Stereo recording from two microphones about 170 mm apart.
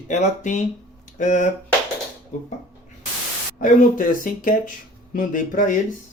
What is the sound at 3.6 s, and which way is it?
Speech, 55° left (ahead or behind).